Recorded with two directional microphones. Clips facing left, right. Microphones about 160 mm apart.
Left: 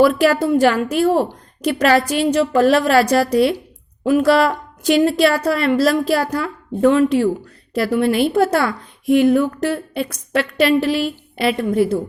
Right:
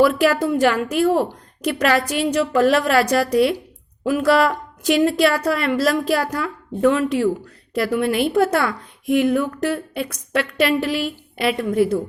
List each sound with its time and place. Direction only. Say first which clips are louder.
0.0 s a woman's voice: left 2 dB; 30° left (ahead or behind)